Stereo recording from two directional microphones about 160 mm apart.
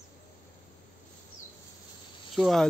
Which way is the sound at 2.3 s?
Centre (ahead or behind).